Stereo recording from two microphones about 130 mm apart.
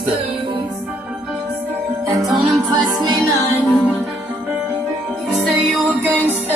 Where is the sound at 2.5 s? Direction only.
35° right (ahead or behind).